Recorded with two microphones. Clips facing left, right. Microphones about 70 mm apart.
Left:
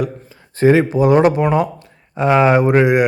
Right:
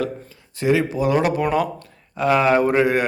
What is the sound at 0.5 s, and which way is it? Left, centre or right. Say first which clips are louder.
Speech: left 7 dB; left.